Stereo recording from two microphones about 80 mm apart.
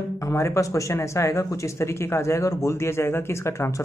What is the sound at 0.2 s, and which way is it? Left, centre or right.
Speech, left.